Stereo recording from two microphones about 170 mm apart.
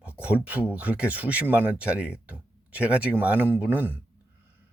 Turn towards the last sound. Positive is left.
turn(degrees=-10)  # may be behind; listen again after turning